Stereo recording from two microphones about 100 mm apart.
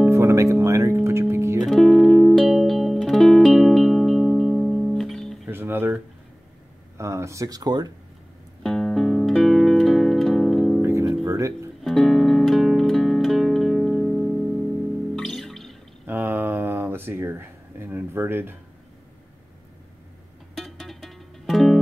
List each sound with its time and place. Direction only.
0.1 s music: 30° right (ahead or behind)
1.7 s music: centre (ahead or behind)
5.5 s guitar: 20° right (ahead or behind)
7.0 s speech: 30° right (ahead or behind)
8.6 s music: 5° left (ahead or behind)
10.8 s music: 30° right (ahead or behind)
11.8 s music: centre (ahead or behind)
16.1 s a sound: 20° right (ahead or behind)
20.5 s music: centre (ahead or behind)